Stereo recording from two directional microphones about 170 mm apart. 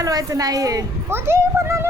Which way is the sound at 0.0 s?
20° right (ahead or behind).